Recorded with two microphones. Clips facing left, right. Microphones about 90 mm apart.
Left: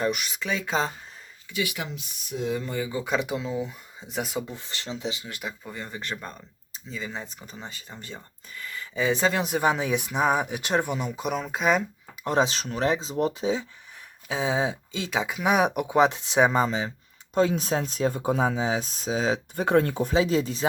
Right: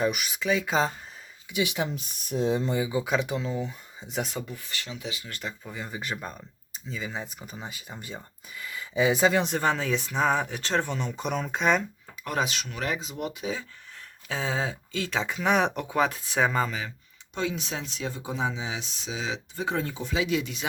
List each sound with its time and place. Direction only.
0.0 s speech: 5° right (ahead or behind)
1.5 s speech: 20° right (ahead or behind)
2.0 s speech: 45° right (ahead or behind)
2.5 s speech: 30° right (ahead or behind)
2.7 s speech: 15° right (ahead or behind)
3.0 s speech: centre (ahead or behind)
4.4 s speech: 30° left (ahead or behind)
5.4 s speech: 5° left (ahead or behind)
12.2 s speech: 25° left (ahead or behind)
17.3 s speech: 40° left (ahead or behind)
20.1 s speech: 35° left (ahead or behind)